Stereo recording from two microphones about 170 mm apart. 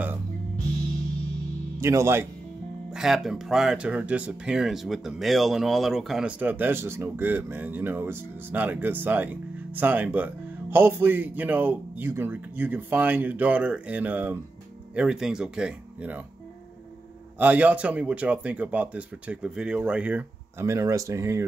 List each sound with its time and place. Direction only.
1.8 s speech: 15° right (ahead or behind)
2.9 s speech: centre (ahead or behind)
17.4 s speech: 10° right (ahead or behind)